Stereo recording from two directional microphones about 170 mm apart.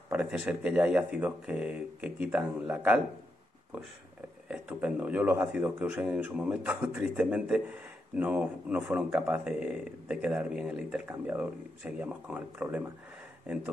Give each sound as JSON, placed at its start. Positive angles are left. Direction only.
{"t": 0.1, "sound": "speech", "side_deg": -5}
{"t": 4.5, "sound": "speech", "side_deg": -5}